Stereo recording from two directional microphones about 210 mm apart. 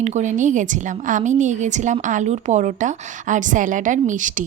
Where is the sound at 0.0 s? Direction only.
35° right (ahead or behind).